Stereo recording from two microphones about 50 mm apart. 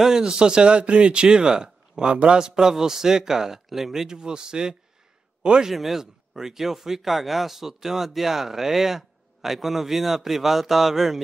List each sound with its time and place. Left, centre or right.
0.0 s speech: centre
5.7 s speech: centre